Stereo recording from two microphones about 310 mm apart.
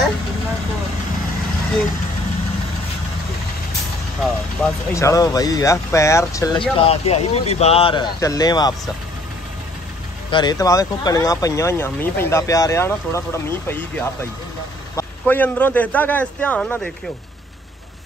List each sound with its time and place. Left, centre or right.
4.2 s speech: centre
10.3 s a man's voice: centre